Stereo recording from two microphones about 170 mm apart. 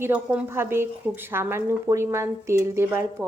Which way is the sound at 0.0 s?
10° right (ahead or behind).